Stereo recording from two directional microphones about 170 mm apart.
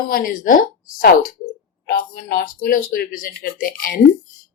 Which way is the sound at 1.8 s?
65° left (ahead or behind).